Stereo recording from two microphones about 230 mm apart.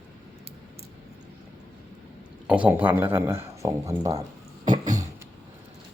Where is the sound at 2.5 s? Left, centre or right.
Centre.